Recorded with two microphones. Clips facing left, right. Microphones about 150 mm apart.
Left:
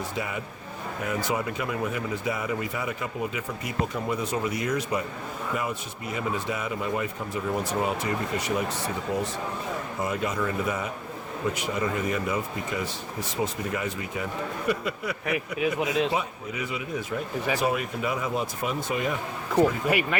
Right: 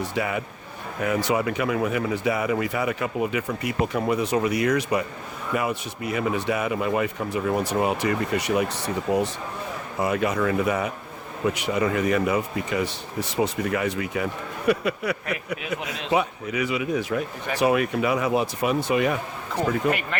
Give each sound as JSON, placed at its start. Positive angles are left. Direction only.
{"t": 0.2, "sound": "speech", "side_deg": -70}
{"t": 19.5, "sound": "speech", "side_deg": 10}